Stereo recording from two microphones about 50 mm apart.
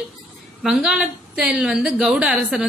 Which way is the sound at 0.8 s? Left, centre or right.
Centre.